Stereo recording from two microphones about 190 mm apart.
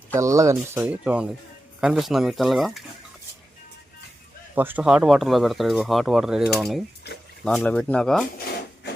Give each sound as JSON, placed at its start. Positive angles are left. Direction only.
{"t": 0.2, "sound": "speech", "side_deg": -15}
{"t": 4.5, "sound": "speech", "side_deg": -10}